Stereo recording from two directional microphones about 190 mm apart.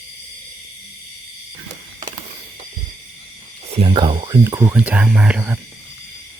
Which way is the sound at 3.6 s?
30° right (ahead or behind).